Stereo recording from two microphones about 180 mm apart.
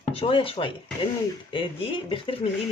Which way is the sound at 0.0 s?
30° left (ahead or behind).